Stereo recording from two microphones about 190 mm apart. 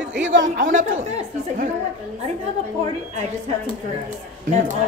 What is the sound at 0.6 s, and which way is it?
Speech, 45° right (ahead or behind).